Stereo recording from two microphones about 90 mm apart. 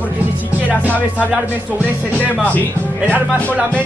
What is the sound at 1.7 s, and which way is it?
Music, 20° right (ahead or behind).